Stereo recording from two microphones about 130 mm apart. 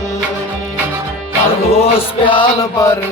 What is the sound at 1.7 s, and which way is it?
Music, 45° left (ahead or behind).